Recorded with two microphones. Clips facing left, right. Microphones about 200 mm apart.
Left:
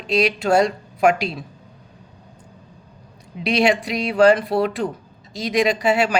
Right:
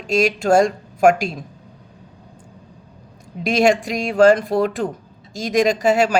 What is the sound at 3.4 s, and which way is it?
Speech, 45° right (ahead or behind).